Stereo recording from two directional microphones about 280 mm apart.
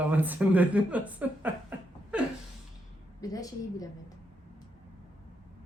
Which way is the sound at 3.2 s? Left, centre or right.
Centre.